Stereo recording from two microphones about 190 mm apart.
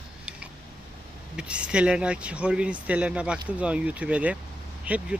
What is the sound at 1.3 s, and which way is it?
Speech, 5° right (ahead or behind).